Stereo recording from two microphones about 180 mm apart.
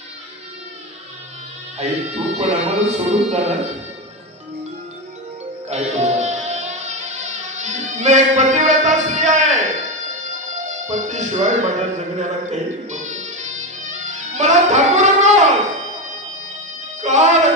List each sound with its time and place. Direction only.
2.3 s speech: 35° right (ahead or behind)
5.7 s music: 40° right (ahead or behind)
17.0 s speech: 40° right (ahead or behind)